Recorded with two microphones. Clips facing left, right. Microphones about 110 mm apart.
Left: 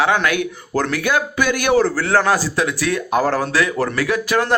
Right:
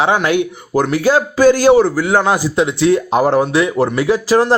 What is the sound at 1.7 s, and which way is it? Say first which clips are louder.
Speech: right 4 dB; 15° right (ahead or behind).